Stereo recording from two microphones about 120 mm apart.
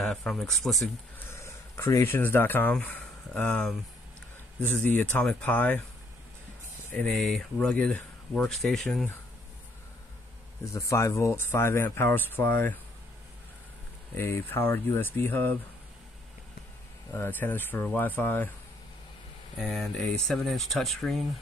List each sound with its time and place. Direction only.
0.0 s speech: 5° left (ahead or behind)
1.3 s speech: 25° left (ahead or behind)
5.2 s speech: 10° left (ahead or behind)
6.9 s speech: 5° left (ahead or behind)
10.7 s speech: 25° left (ahead or behind)
14.1 s speech: 20° left (ahead or behind)
17.1 s speech: 15° left (ahead or behind)
19.6 s speech: centre (ahead or behind)